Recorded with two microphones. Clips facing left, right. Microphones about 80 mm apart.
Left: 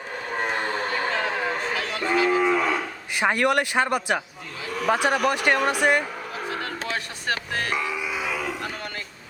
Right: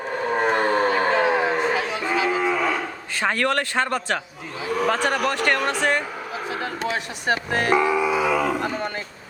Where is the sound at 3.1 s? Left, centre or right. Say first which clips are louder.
Left 1 dB; centre.